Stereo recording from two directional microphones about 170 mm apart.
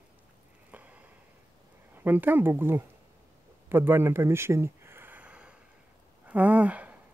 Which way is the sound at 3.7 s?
15° right (ahead or behind).